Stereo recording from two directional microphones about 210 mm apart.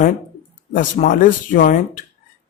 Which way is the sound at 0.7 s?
40° left (ahead or behind).